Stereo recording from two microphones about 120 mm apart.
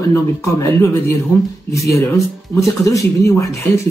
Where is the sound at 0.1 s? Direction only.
20° left (ahead or behind).